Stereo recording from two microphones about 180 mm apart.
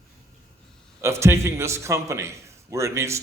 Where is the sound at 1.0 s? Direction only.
15° right (ahead or behind).